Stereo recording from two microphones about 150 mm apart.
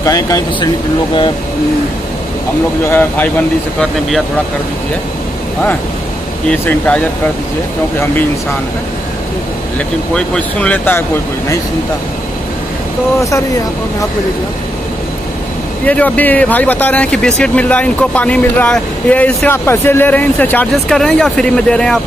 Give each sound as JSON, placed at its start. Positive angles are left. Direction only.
{"t": 0.0, "sound": "speech", "side_deg": 25}
{"t": 2.9, "sound": "speech", "side_deg": 15}
{"t": 9.8, "sound": "speech", "side_deg": 5}
{"t": 15.8, "sound": "speech", "side_deg": 10}